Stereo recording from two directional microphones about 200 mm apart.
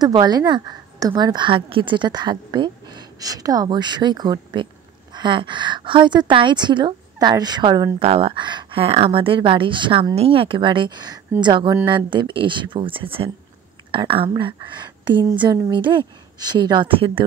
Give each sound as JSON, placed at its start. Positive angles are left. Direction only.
{"t": 0.0, "sound": "a woman's voice", "side_deg": -20}